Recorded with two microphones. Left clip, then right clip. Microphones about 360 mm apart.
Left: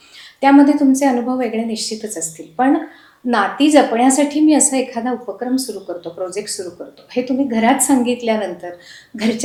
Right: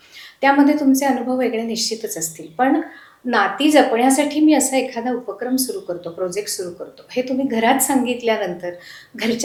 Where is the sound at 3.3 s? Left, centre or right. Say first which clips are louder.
Left 2 dB; left.